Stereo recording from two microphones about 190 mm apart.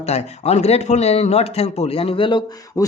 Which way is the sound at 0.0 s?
35° left (ahead or behind).